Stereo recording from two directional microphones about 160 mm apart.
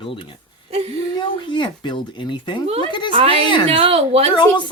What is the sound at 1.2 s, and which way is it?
Speech, 30° left (ahead or behind).